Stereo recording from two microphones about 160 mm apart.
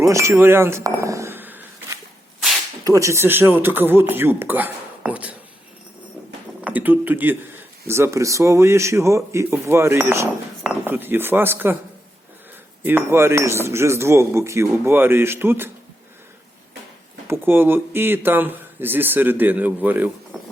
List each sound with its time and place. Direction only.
0.0 s chink: 20° right (ahead or behind)
2.8 s speech: 20° right (ahead or behind)
6.6 s speech: 10° right (ahead or behind)
12.8 s speech: 15° right (ahead or behind)
17.2 s speech: 15° right (ahead or behind)